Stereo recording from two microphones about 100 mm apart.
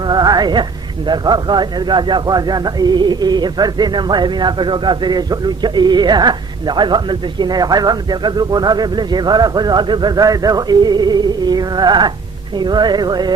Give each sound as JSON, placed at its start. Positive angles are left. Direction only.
{"t": 0.1, "sound": "music", "side_deg": -45}
{"t": 1.0, "sound": "speech", "side_deg": -45}